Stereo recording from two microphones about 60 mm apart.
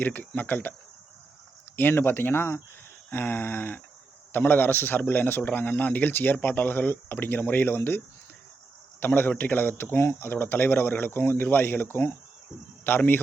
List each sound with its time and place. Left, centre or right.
0.0 s speech: left
1.7 s a man's voice: left